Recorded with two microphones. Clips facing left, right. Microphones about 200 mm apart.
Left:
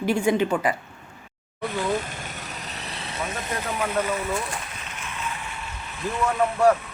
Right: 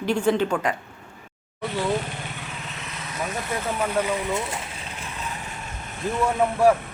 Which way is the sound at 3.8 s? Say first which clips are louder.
Right 1 dB; 10° right (ahead or behind).